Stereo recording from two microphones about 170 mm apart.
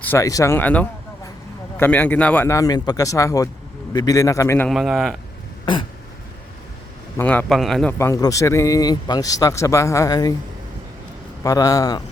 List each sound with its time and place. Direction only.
0.0 s a man's voice: 15° left (ahead or behind)
4.7 s speech: centre (ahead or behind)
7.2 s speech: 10° left (ahead or behind)
7.9 s a man's voice: 20° left (ahead or behind)
11.4 s a man's voice: 20° left (ahead or behind)